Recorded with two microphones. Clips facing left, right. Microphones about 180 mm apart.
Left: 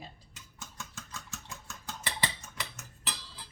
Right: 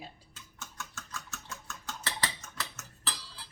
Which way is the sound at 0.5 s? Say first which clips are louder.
Right 1 dB; 15° left (ahead or behind).